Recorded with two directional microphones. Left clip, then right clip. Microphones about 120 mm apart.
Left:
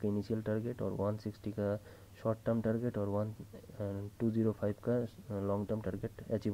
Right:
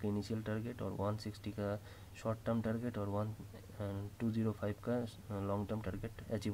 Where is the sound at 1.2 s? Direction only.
30° left (ahead or behind).